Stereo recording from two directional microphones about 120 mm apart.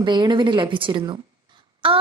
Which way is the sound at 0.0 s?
40° right (ahead or behind).